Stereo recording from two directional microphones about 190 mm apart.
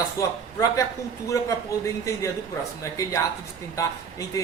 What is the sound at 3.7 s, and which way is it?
Speech, 15° left (ahead or behind).